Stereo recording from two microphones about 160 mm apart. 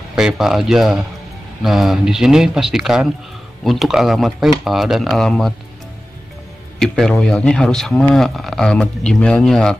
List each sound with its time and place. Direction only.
0.1 s speech: 5° right (ahead or behind)
6.8 s speech: 5° left (ahead or behind)